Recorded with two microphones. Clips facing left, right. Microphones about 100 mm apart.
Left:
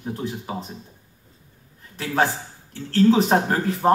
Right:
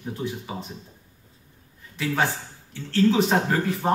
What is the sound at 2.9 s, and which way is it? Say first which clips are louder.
Speech: left 3 dB; 40° left (ahead or behind).